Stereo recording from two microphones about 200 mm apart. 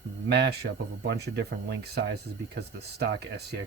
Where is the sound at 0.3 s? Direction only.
55° right (ahead or behind).